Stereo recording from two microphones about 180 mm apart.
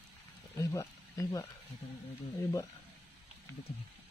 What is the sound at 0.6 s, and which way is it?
Speech, 15° left (ahead or behind).